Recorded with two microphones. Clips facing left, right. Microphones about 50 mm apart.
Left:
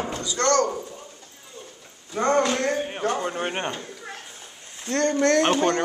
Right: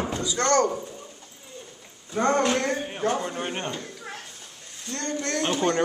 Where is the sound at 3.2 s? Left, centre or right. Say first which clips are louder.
Left 3 dB; left.